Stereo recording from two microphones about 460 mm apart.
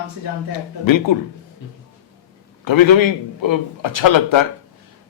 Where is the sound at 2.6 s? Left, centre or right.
Left.